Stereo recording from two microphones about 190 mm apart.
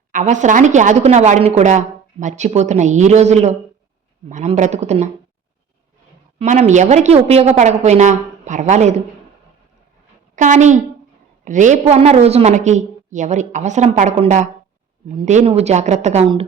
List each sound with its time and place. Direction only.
0.1 s a woman's voice: 40° right (ahead or behind)
6.4 s a woman's voice: 40° right (ahead or behind)
10.3 s a woman's voice: 40° right (ahead or behind)